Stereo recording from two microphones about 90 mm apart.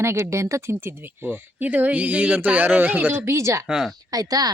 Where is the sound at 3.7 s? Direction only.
5° right (ahead or behind).